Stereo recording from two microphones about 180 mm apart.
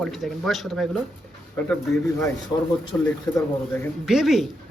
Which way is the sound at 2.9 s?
10° left (ahead or behind).